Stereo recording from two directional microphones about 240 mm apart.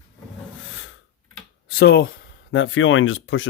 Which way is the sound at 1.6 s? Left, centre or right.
Left.